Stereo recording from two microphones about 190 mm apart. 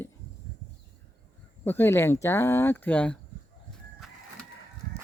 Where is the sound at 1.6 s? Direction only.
10° left (ahead or behind).